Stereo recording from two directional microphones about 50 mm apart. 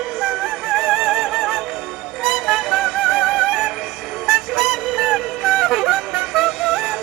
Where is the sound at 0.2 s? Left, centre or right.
Centre.